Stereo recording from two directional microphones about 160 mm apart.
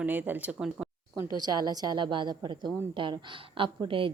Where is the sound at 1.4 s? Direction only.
25° right (ahead or behind).